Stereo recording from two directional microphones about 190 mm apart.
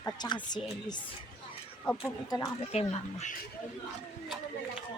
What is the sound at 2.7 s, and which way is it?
Speech, 35° left (ahead or behind).